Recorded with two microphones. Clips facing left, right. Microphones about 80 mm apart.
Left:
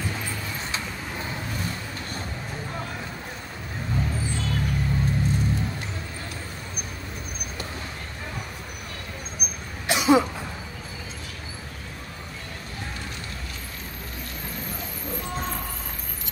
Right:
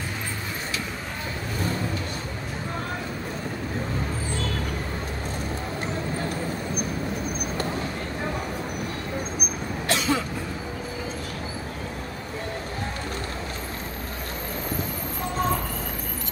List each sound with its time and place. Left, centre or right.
9.8 s cough: centre